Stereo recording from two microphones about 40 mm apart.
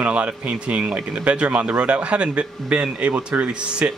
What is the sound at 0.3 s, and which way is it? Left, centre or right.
Speech, right.